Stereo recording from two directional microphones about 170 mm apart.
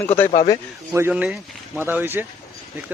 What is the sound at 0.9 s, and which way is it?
Speech, 10° right (ahead or behind).